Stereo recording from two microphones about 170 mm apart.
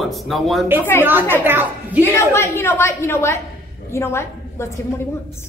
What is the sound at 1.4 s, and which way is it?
Speech, 10° right (ahead or behind).